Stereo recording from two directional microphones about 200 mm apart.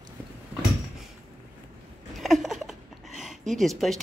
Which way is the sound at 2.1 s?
Centre (ahead or behind).